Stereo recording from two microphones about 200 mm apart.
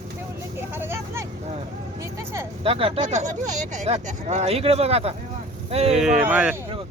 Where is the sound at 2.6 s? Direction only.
30° right (ahead or behind).